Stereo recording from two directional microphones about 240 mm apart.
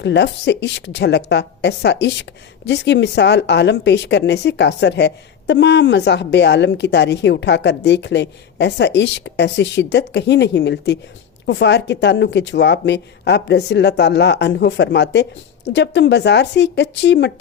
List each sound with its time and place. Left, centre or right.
0.0 s speech: left